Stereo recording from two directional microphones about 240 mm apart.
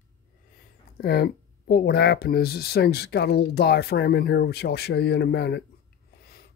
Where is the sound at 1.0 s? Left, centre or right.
Left.